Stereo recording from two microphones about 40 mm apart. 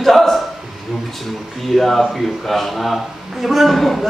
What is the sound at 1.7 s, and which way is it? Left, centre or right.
A man's voice, centre.